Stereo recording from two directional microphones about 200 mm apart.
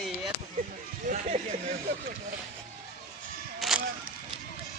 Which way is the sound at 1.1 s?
35° right (ahead or behind).